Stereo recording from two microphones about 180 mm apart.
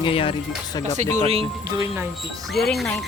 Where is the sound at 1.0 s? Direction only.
40° right (ahead or behind).